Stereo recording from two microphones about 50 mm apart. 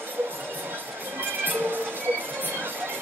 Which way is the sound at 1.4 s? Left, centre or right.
Right.